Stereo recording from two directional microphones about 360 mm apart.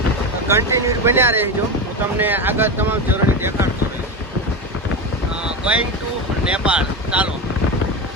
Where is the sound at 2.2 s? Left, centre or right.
Centre.